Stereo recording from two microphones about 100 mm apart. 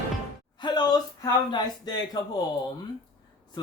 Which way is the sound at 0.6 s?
45° left (ahead or behind).